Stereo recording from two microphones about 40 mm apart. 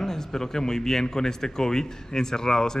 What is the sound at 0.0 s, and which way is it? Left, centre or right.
Speech, centre.